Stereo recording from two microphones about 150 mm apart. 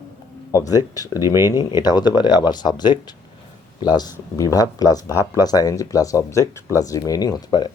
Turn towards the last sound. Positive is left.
turn(degrees=25)  # may be behind; listen again after turning